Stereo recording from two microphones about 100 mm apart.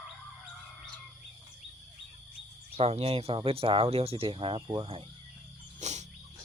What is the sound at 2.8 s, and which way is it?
Speech, 90° right.